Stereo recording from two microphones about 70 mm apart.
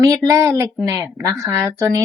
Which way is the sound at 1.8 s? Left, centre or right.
Right.